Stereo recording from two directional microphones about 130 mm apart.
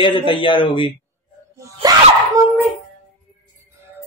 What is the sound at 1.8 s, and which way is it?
Speech, 30° right (ahead or behind).